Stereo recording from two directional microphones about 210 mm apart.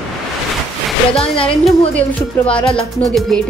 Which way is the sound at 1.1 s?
25° left (ahead or behind).